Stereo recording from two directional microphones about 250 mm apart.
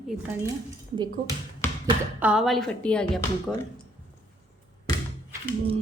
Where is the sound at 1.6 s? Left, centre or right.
Centre.